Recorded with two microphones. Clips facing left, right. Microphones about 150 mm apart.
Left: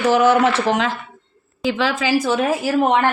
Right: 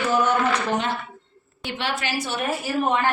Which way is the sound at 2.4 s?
90° left.